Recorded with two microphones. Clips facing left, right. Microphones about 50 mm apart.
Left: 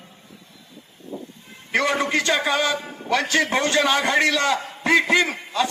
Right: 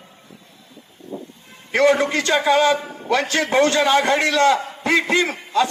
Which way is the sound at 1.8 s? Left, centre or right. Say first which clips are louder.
Right 6 dB; right.